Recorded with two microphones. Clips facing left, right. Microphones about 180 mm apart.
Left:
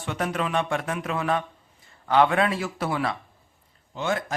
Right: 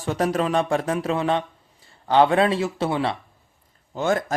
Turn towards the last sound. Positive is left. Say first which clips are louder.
# right 5 dB
turn(degrees=-45)  # may be behind; listen again after turning